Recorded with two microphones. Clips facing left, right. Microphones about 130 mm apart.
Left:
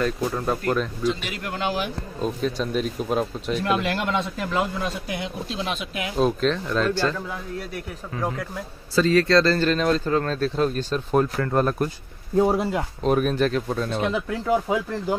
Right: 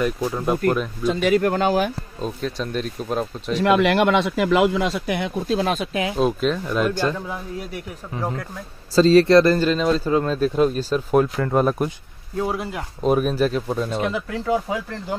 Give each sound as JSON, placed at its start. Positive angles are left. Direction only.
{"t": 0.0, "sound": "speech", "side_deg": -10}
{"t": 1.0, "sound": "speech", "side_deg": -45}
{"t": 2.2, "sound": "speech", "side_deg": 0}
{"t": 3.5, "sound": "a man's voice", "side_deg": -80}
{"t": 6.1, "sound": "speech", "side_deg": -5}
{"t": 8.9, "sound": "speech", "side_deg": -30}
{"t": 9.7, "sound": "speech", "side_deg": -5}
{"t": 12.4, "sound": "speech", "side_deg": 30}
{"t": 13.0, "sound": "speech", "side_deg": -5}
{"t": 14.7, "sound": "speech", "side_deg": 25}